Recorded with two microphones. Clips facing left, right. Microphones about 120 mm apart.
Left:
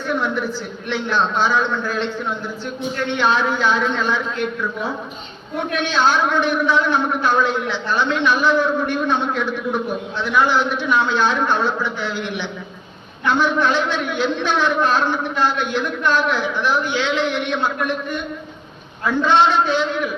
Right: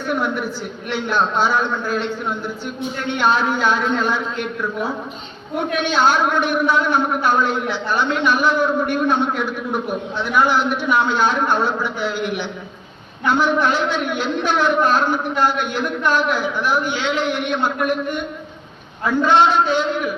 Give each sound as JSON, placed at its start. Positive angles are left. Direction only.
{"t": 0.1, "sound": "a man's voice", "side_deg": -10}
{"t": 3.2, "sound": "a man's voice", "side_deg": -10}
{"t": 5.7, "sound": "a man's voice", "side_deg": -15}